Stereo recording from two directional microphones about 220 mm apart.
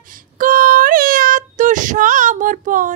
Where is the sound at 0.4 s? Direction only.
40° right (ahead or behind).